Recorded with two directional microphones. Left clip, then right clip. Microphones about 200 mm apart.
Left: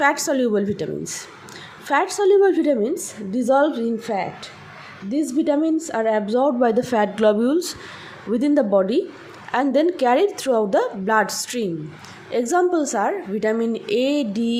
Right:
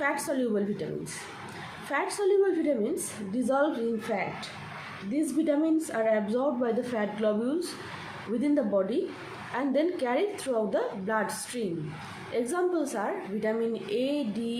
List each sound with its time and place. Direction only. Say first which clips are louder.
0.0 s a woman's voice: left 10 dB; 50° left (ahead or behind)